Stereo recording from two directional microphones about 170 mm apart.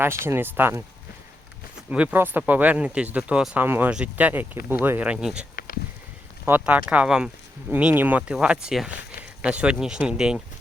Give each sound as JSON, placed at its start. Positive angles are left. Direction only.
{"t": 0.3, "sound": "speech", "side_deg": -10}
{"t": 1.9, "sound": "speech", "side_deg": -5}
{"t": 5.5, "sound": "a sound", "side_deg": 60}
{"t": 6.4, "sound": "speech", "side_deg": -10}